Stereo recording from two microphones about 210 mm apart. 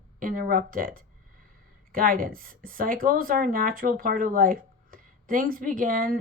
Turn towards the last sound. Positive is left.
turn(degrees=-40)  # may be behind; listen again after turning